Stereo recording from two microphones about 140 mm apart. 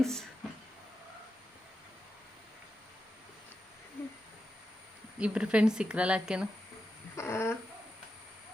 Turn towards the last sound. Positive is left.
turn(degrees=20)  # may be behind; listen again after turning